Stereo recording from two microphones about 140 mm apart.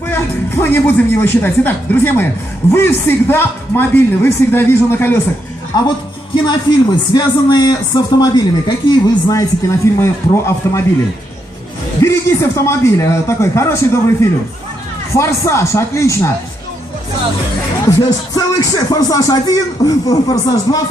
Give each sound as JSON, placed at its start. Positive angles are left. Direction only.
{"t": 0.1, "sound": "a man's voice", "side_deg": 15}
{"t": 6.3, "sound": "a man's voice", "side_deg": 30}
{"t": 12.0, "sound": "a man's voice", "side_deg": 20}
{"t": 18.3, "sound": "a man's voice", "side_deg": 25}